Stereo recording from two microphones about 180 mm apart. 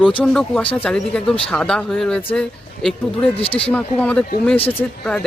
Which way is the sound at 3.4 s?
30° left (ahead or behind).